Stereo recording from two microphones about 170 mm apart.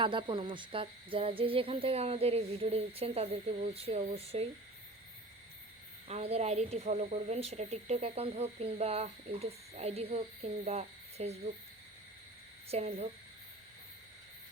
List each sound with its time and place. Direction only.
0.0 s speech: 30° right (ahead or behind)
6.1 s speech: 40° right (ahead or behind)
12.7 s speech: 40° right (ahead or behind)